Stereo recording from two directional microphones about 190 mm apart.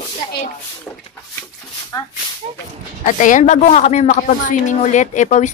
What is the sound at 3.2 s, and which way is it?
Speech, 40° left (ahead or behind).